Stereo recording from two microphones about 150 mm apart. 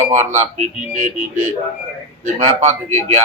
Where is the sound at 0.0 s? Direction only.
50° right (ahead or behind).